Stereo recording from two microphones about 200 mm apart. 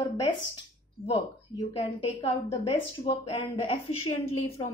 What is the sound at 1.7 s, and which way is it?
Speech, 30° left (ahead or behind).